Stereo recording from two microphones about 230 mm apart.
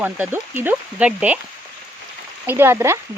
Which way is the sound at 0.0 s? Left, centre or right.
Centre.